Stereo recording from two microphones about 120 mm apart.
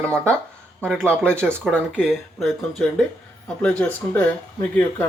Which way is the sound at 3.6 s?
10° left (ahead or behind).